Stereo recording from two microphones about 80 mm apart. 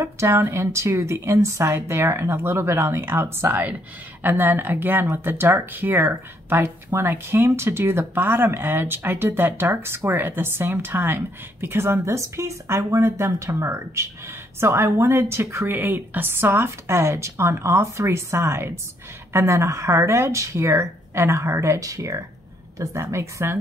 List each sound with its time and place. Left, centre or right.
0.0 s a woman's voice: right